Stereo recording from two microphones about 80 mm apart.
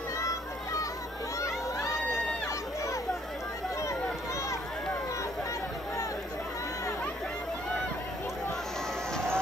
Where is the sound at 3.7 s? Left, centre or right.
Left.